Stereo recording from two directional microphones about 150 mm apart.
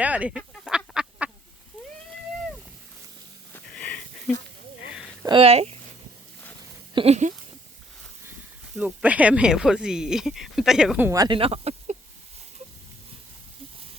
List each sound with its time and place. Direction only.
0.0 s duck: 10° right (ahead or behind)
3.7 s sniff: 5° left (ahead or behind)
4.9 s a sound: 5° right (ahead or behind)
5.4 s speech: 45° right (ahead or behind)
6.9 s speech: 45° right (ahead or behind)
8.8 s speech: 10° right (ahead or behind)
11.1 s speech: 25° right (ahead or behind)
11.3 s speech: 40° right (ahead or behind)